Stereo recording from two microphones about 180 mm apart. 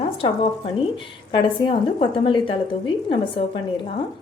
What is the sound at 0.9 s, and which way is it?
A woman's voice, 25° left (ahead or behind).